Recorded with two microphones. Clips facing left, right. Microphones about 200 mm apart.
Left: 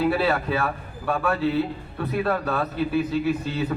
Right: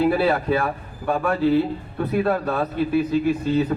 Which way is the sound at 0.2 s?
10° right (ahead or behind).